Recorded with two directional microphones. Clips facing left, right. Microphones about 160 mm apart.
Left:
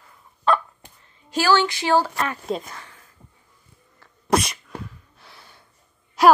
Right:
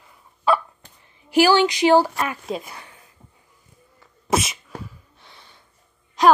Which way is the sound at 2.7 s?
15° right (ahead or behind).